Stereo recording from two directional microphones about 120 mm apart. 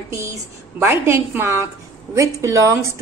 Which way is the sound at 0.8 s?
20° right (ahead or behind).